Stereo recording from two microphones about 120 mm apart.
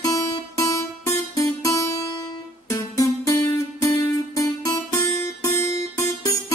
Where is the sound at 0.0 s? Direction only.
30° left (ahead or behind).